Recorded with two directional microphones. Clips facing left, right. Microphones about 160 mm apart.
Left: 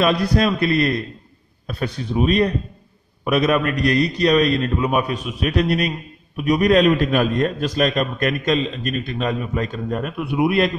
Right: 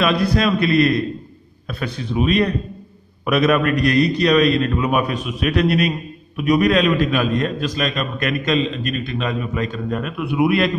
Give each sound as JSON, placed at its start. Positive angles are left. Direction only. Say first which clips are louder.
{"t": 0.0, "sound": "a man's voice", "louder": "even", "side_deg": 40}
{"t": 2.2, "sound": "a man's voice", "louder": "even", "side_deg": 40}